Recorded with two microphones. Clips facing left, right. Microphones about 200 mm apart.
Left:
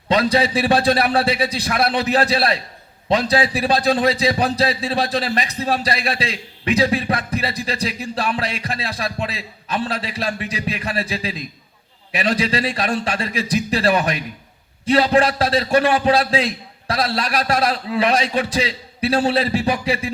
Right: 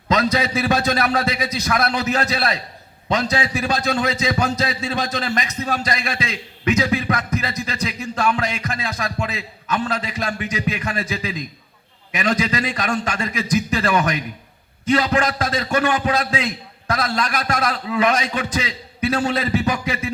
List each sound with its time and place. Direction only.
0.1 s a man's voice: 30° left (ahead or behind)